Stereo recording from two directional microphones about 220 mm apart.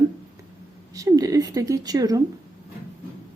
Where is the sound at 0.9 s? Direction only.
15° right (ahead or behind).